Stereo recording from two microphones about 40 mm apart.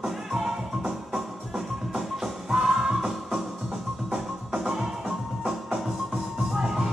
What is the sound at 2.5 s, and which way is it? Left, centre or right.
Music, centre.